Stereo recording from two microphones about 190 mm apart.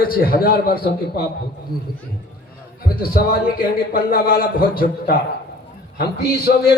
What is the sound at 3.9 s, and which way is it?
Speech, 50° left (ahead or behind).